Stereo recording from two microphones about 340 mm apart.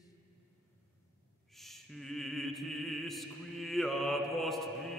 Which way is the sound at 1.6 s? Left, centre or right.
Centre.